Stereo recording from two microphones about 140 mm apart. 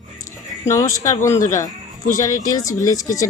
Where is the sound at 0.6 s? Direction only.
20° left (ahead or behind).